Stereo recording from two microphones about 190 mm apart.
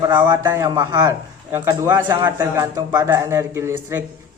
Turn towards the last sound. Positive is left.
turn(degrees=-15)  # may be behind; listen again after turning